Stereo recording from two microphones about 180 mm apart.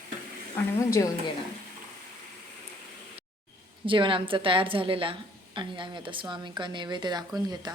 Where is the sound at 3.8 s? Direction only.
30° right (ahead or behind).